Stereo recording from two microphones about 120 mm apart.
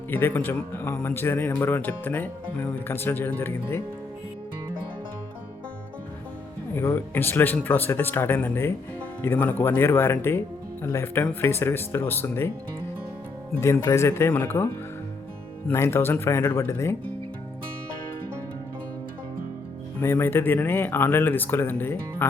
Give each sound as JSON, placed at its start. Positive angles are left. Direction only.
{"t": 0.1, "sound": "speech", "side_deg": 15}
{"t": 6.7, "sound": "speech", "side_deg": 20}
{"t": 13.8, "sound": "speech", "side_deg": 20}
{"t": 20.0, "sound": "speech", "side_deg": 20}